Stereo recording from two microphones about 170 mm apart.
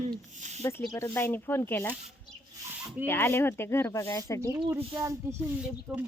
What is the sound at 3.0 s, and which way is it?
Speech, 15° left (ahead or behind).